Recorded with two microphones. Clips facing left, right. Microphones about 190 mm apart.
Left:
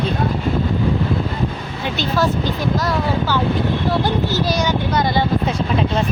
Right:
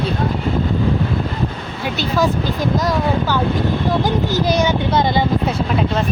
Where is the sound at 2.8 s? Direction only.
15° right (ahead or behind).